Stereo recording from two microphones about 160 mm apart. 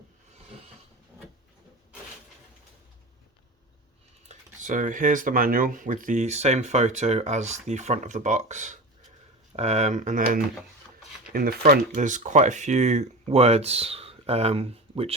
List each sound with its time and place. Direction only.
4.3 s speech: 55° right (ahead or behind)